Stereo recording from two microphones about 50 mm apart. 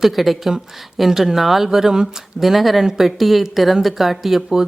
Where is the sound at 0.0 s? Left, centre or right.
Centre.